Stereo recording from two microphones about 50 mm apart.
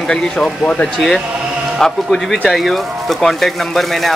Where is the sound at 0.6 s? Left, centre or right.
Left.